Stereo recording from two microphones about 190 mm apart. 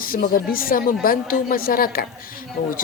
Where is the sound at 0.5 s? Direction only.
50° left (ahead or behind).